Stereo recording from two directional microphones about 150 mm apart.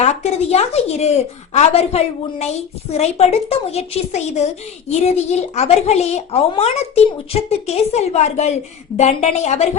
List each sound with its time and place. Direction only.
0.0 s a woman's voice: 45° left (ahead or behind)